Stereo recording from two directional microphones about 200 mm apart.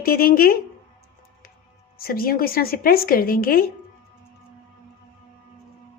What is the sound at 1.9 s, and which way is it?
A woman's voice, 45° left (ahead or behind).